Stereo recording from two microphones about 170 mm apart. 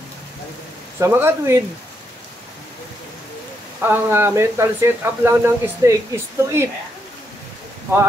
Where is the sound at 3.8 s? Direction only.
15° right (ahead or behind).